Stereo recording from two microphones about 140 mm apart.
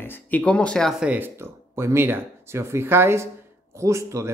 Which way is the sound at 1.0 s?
10° right (ahead or behind).